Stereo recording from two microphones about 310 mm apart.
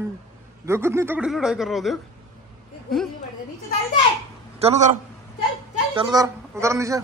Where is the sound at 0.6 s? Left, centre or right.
Centre.